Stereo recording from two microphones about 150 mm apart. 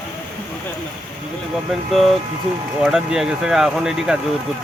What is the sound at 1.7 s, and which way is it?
Speech, centre (ahead or behind).